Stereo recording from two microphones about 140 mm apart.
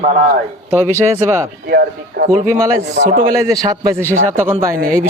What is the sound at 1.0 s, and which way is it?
Speech, 20° right (ahead or behind).